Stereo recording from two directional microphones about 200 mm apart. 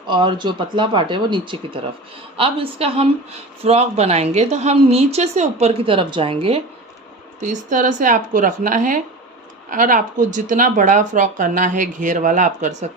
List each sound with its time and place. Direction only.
0.1 s speech: 25° right (ahead or behind)
7.4 s speech: 40° right (ahead or behind)